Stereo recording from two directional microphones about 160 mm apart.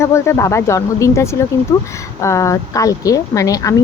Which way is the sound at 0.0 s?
15° left (ahead or behind).